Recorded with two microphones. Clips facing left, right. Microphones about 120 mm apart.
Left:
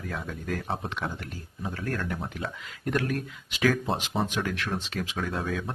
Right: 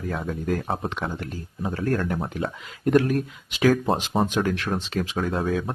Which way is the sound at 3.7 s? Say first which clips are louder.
Right 7 dB; 45° right (ahead or behind).